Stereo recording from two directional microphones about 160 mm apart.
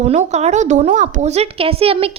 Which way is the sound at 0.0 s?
50° right (ahead or behind).